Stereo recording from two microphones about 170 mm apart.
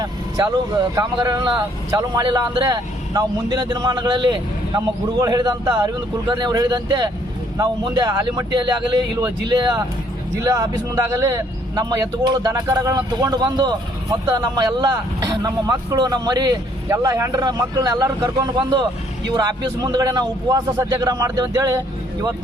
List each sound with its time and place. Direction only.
0.0 s vehicle: 25° right (ahead or behind)
1.1 s speech: 25° right (ahead or behind)